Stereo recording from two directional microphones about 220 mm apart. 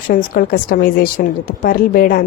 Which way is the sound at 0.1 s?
40° left (ahead or behind).